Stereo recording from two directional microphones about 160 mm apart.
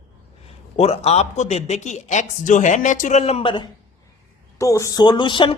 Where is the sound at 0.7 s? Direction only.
40° left (ahead or behind).